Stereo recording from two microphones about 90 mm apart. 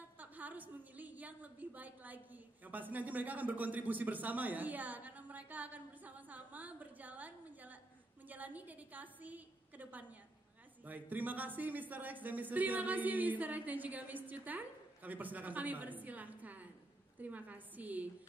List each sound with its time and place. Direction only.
0.2 s a woman's voice: 20° right (ahead or behind)